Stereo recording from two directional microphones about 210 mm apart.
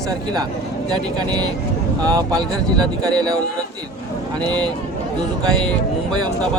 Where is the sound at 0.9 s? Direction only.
20° right (ahead or behind).